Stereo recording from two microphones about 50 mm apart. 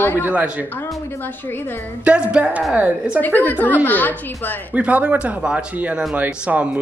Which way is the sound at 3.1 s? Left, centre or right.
Left.